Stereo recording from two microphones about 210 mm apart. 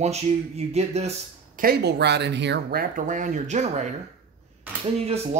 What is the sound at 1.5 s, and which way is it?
Speech, 45° right (ahead or behind).